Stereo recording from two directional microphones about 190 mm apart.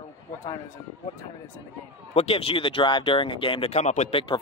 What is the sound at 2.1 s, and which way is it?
Speech, 30° left (ahead or behind).